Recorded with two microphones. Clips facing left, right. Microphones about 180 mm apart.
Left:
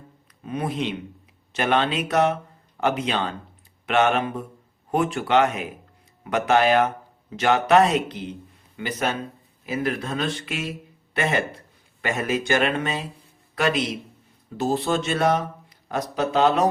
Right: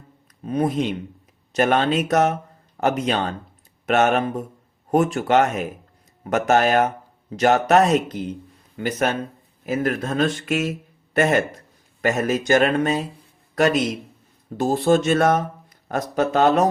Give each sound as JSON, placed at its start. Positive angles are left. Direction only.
{"t": 0.4, "sound": "speech", "side_deg": -40}